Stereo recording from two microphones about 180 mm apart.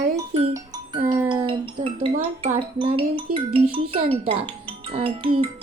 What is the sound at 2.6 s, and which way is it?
Speech, 30° right (ahead or behind).